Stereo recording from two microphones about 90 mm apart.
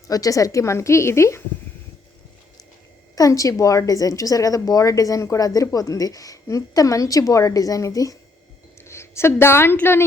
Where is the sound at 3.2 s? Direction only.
40° left (ahead or behind).